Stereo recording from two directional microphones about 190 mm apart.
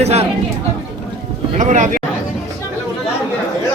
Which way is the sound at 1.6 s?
40° right (ahead or behind).